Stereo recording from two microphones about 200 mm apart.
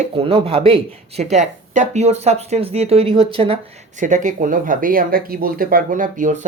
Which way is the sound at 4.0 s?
40° right (ahead or behind).